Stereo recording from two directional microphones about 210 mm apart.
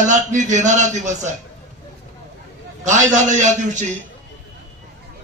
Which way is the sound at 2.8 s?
35° right (ahead or behind).